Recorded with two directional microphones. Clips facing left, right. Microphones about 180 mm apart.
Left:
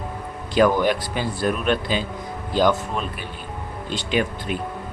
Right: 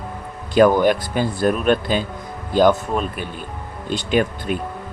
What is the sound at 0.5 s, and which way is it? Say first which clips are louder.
Speech: right 4 dB; 50° right (ahead or behind).